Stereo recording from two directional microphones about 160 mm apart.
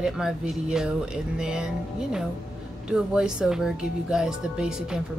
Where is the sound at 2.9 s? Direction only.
5° right (ahead or behind).